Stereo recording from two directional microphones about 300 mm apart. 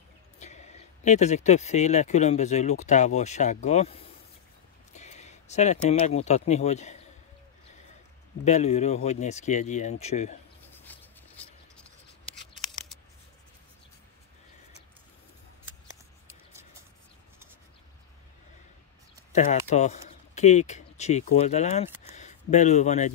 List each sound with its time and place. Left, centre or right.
0.4 s speech: left
8.5 s speech: left
10.7 s bird: centre
12.5 s scissors: centre
19.3 s speech: left